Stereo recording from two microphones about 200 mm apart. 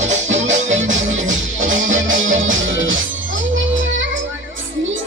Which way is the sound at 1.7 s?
75° right (ahead or behind).